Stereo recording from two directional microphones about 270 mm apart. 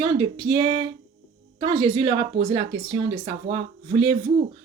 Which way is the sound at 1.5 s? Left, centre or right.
Centre.